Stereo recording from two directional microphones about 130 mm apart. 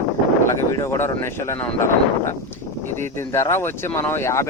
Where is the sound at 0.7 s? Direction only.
20° left (ahead or behind).